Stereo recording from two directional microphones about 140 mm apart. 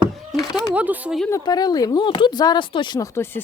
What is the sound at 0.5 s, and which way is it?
Speech, 10° right (ahead or behind).